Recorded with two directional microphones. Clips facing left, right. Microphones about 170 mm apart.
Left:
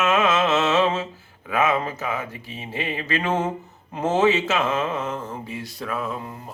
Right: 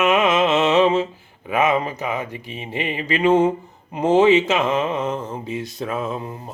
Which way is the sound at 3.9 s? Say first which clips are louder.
Right 5 dB; 15° right (ahead or behind).